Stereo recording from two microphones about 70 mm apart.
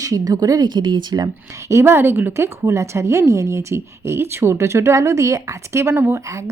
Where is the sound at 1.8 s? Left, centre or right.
Right.